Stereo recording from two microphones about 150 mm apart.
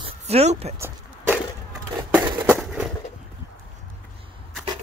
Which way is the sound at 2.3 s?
30° right (ahead or behind).